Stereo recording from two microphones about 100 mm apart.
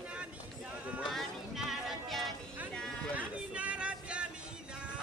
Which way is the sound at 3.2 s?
10° right (ahead or behind).